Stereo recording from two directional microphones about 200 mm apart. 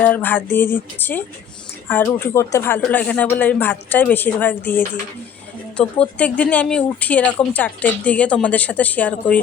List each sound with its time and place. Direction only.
0.0 s speech: 10° left (ahead or behind)